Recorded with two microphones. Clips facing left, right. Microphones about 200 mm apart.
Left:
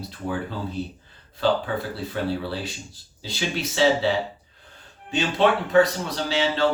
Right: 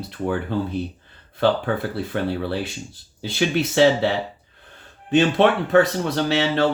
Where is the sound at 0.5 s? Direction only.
60° right (ahead or behind).